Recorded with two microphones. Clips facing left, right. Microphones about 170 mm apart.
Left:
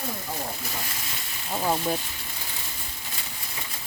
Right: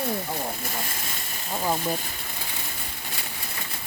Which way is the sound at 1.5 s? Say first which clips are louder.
Left 1 dB; centre (ahead or behind).